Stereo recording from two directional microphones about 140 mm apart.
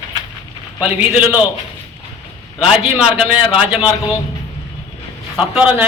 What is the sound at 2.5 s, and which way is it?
Speech, 40° left (ahead or behind).